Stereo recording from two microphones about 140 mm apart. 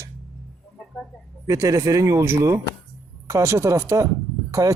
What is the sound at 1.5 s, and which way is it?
Speech, 25° right (ahead or behind).